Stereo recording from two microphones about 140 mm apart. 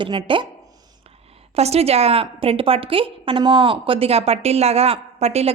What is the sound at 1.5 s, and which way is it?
A woman's voice, 50° right (ahead or behind).